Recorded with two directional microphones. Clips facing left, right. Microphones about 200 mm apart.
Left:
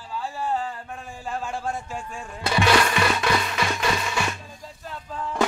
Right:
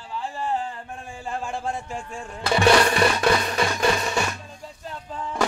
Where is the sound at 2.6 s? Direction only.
35° right (ahead or behind).